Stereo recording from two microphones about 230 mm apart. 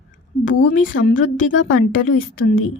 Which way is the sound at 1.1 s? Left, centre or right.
Left.